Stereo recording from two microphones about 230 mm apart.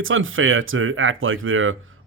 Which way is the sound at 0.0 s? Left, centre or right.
Right.